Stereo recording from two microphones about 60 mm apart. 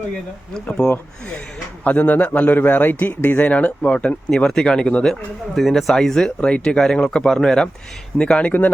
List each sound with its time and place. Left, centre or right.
0.5 s speech: centre
1.8 s a man's voice: left
5.5 s speech: centre
6.4 s a man's voice: centre